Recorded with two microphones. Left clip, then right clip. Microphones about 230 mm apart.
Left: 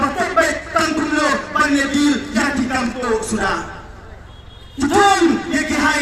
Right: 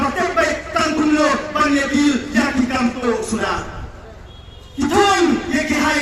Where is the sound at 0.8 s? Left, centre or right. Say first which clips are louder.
Right 3 dB; left.